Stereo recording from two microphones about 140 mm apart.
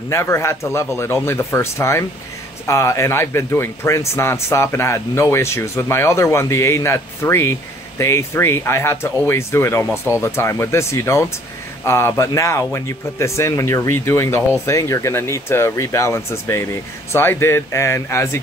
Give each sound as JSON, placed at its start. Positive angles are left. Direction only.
{"t": 0.1, "sound": "speech", "side_deg": 20}